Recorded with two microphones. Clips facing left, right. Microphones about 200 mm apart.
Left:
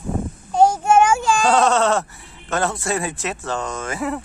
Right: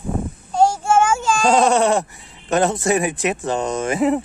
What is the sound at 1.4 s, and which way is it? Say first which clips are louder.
Speech: right 3 dB; 10° right (ahead or behind).